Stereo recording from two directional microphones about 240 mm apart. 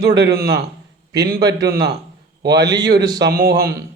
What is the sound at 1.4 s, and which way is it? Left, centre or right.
Speech, centre.